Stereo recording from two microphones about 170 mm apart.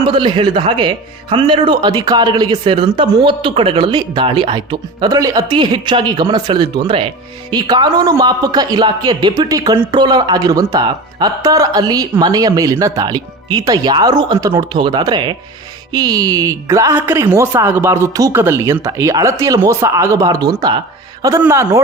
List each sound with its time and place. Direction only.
0.0 s a man's voice: 30° right (ahead or behind)